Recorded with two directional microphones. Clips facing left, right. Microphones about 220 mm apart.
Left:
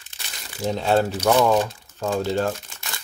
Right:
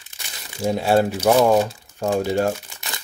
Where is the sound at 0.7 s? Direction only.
10° right (ahead or behind).